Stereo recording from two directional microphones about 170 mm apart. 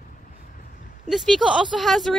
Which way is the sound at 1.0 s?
Centre (ahead or behind).